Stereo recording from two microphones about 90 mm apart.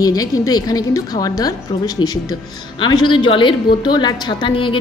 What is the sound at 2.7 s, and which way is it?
A woman's voice, 55° left (ahead or behind).